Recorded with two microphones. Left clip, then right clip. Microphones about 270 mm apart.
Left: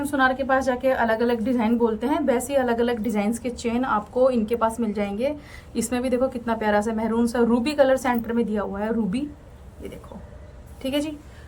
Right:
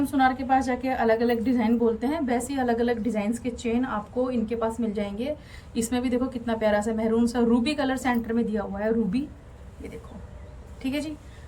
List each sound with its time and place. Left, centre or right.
0.2 s a woman's voice: centre